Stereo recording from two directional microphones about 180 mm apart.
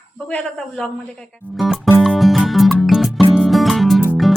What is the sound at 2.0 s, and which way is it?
Music, centre (ahead or behind).